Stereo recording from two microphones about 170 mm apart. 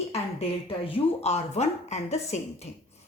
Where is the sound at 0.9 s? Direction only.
35° left (ahead or behind).